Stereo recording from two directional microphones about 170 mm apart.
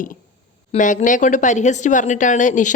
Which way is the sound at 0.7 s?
50° left (ahead or behind).